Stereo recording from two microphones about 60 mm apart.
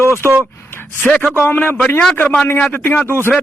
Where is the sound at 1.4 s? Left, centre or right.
Left.